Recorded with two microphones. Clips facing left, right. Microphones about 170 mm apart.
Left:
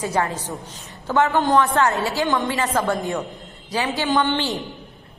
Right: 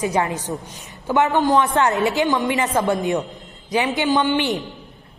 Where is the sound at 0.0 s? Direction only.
20° right (ahead or behind).